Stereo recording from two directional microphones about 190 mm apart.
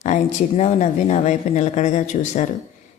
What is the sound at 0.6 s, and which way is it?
Speech, 35° left (ahead or behind).